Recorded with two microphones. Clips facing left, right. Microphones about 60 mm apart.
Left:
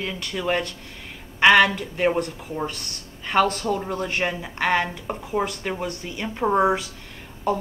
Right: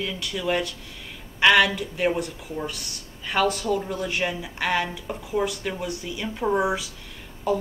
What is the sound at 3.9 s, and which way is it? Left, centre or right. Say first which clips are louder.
A woman's voice: left 1 dB; left.